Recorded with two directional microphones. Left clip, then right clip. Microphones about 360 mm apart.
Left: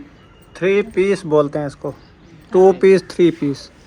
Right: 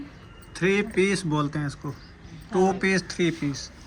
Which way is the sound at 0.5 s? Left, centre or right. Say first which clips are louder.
Left 7 dB; centre.